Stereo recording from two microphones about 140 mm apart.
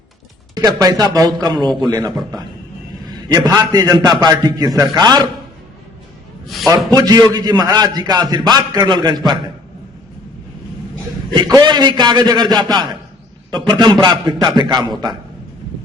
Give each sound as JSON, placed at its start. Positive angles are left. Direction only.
{"t": 0.5, "sound": "a man's voice", "side_deg": -30}
{"t": 3.1, "sound": "a man's voice", "side_deg": -30}
{"t": 6.7, "sound": "a man's voice", "side_deg": -25}
{"t": 11.3, "sound": "a man's voice", "side_deg": -30}
{"t": 14.3, "sound": "a man's voice", "side_deg": 0}
{"t": 14.5, "sound": "a man's voice", "side_deg": -30}